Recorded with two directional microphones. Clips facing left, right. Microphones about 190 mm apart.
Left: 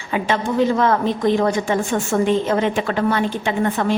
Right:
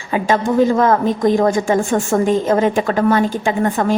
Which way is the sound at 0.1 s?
40° right (ahead or behind).